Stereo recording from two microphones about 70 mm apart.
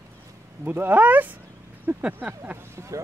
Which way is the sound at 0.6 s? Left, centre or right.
Right.